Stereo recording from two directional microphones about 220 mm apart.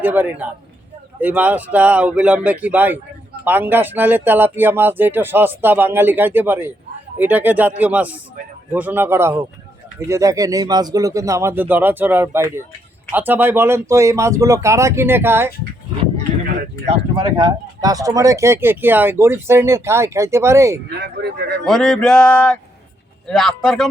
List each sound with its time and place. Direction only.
0.0 s speech: 10° right (ahead or behind)
16.8 s speech: 25° right (ahead or behind)
21.0 s speech: 45° right (ahead or behind)
21.6 s male singing: centre (ahead or behind)